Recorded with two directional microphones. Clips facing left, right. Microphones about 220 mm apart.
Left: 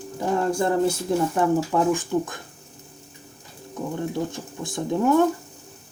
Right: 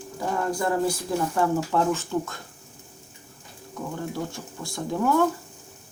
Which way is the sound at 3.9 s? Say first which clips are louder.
Left 4 dB; 20° left (ahead or behind).